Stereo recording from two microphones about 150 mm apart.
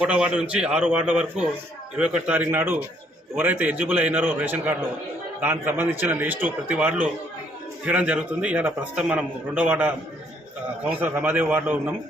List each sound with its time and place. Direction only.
0.0 s a man's voice: 5° right (ahead or behind)